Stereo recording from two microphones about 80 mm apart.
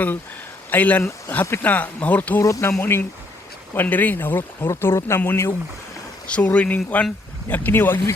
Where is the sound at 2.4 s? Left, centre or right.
Left.